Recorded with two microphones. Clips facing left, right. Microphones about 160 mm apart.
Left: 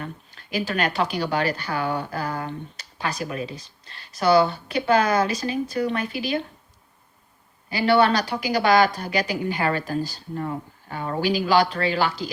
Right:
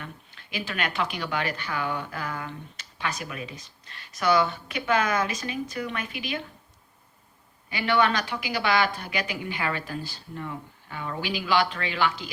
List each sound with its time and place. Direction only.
0.0 s a woman's voice: 40° left (ahead or behind)
7.7 s a woman's voice: 35° left (ahead or behind)